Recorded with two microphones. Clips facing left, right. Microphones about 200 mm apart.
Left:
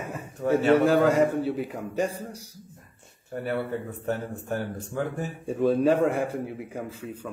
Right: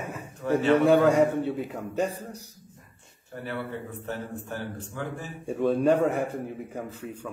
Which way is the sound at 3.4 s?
45° left (ahead or behind).